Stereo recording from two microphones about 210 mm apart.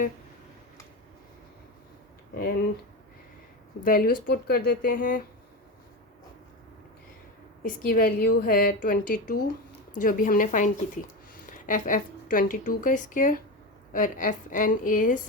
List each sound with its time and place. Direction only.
3.8 s speech: 40° left (ahead or behind)
7.6 s a woman's voice: 45° left (ahead or behind)